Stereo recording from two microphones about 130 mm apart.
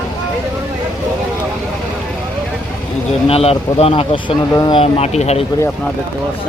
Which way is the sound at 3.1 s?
50° left (ahead or behind).